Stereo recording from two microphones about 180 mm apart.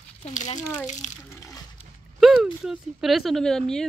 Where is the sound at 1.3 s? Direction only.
15° left (ahead or behind).